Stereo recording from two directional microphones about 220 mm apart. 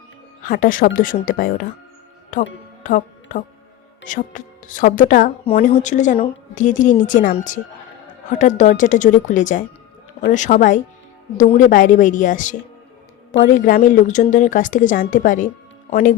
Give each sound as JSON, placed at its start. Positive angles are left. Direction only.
{"t": 0.4, "sound": "speech", "side_deg": 40}